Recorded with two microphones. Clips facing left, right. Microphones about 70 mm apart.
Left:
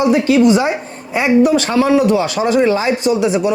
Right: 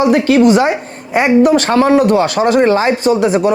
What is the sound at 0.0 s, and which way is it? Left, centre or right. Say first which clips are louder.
A woman's voice: right 2 dB; right.